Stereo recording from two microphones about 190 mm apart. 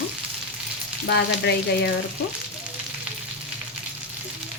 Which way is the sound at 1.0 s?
65° left (ahead or behind).